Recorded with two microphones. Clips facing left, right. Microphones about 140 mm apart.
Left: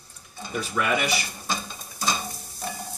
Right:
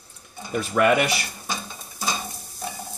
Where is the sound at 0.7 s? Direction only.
60° right (ahead or behind).